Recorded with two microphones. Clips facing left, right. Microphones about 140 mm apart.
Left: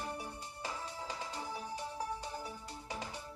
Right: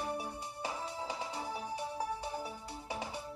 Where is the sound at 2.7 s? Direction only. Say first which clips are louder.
Right 3 dB; 10° right (ahead or behind).